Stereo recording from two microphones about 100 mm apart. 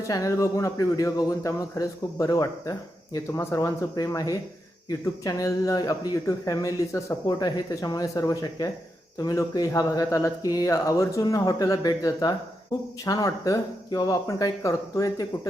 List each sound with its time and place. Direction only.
0.1 s speech: 35° left (ahead or behind)